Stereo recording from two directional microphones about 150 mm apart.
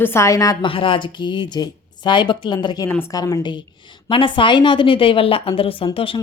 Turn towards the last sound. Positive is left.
turn(degrees=30)  # may be behind; listen again after turning